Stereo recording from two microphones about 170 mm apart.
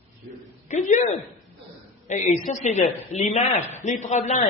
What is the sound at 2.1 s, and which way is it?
A man's voice, 45° left (ahead or behind).